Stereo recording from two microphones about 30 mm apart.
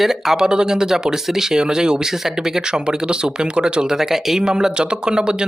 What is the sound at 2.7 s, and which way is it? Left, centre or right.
Speech, right.